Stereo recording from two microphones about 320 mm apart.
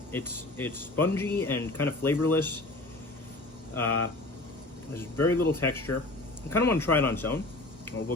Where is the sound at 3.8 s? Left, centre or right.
Left.